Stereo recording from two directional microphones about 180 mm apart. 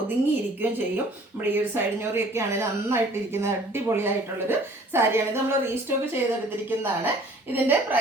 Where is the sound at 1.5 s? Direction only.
10° right (ahead or behind).